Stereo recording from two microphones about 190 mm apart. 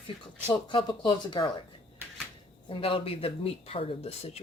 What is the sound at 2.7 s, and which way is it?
Speech, 30° left (ahead or behind).